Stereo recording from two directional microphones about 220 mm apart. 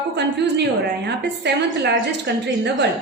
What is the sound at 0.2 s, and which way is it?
A woman's voice, 50° right (ahead or behind).